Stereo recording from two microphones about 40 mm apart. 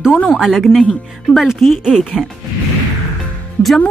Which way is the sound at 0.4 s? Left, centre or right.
Centre.